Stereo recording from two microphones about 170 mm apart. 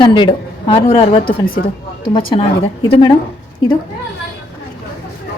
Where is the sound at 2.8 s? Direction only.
30° left (ahead or behind).